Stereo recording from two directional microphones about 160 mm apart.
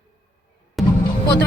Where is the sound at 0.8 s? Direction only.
Centre (ahead or behind).